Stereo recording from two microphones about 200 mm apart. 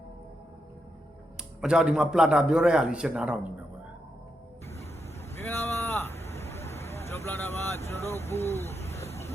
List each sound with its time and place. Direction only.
1.4 s a man's voice: 5° right (ahead or behind)
5.3 s boat: 10° left (ahead or behind)
7.1 s vehicle: 10° left (ahead or behind)
8.2 s speech: 30° left (ahead or behind)